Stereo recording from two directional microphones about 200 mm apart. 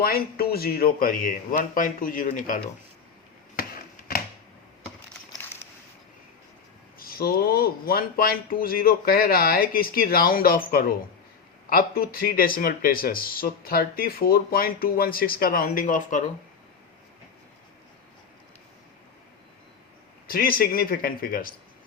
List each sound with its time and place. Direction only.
0.0 s speech: 50° left (ahead or behind)
3.5 s chop: 45° left (ahead or behind)
7.0 s speech: 50° left (ahead or behind)
20.2 s speech: 45° left (ahead or behind)